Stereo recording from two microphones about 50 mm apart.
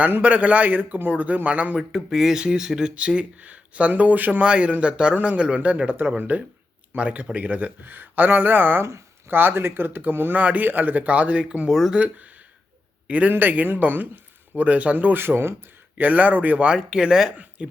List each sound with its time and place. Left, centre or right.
0.2 s speech: right
1.9 s speech: centre
2.9 s speech: right
8.8 s speech: right
9.3 s speech: right
11.7 s speech: centre
11.9 s a man's voice: right
16.0 s speech: right
16.7 s speech: centre
17.3 s speech: right